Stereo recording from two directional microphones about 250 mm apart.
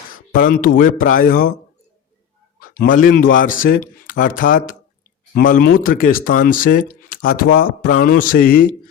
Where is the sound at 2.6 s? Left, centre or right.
Left.